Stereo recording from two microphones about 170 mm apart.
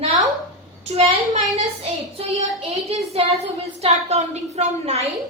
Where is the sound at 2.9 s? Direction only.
40° right (ahead or behind).